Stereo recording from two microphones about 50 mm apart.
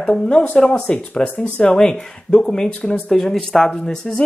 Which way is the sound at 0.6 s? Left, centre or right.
Centre.